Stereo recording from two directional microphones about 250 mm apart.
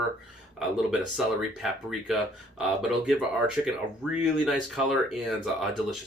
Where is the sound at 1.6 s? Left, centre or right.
Centre.